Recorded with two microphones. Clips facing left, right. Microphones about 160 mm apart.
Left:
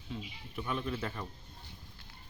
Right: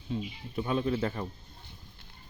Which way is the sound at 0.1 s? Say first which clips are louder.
Right 8 dB; 30° right (ahead or behind).